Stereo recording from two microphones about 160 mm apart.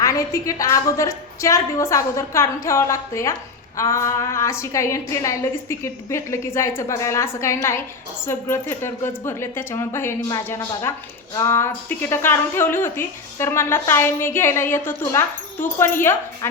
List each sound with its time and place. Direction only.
0.0 s a woman's voice: 20° left (ahead or behind)